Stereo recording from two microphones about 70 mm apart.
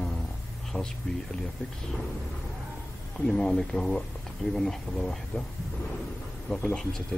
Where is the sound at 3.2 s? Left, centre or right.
Centre.